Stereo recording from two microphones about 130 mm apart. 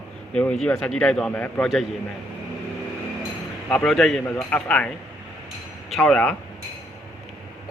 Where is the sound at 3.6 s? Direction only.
10° left (ahead or behind).